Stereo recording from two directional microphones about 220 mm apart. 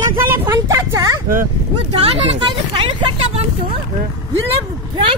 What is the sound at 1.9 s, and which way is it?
Speech, 25° right (ahead or behind).